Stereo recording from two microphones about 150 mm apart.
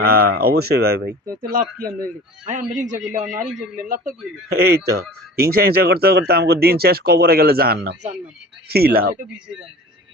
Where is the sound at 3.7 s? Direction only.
70° right (ahead or behind).